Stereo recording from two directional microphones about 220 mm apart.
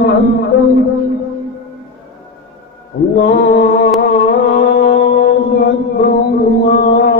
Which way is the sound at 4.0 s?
45° left (ahead or behind).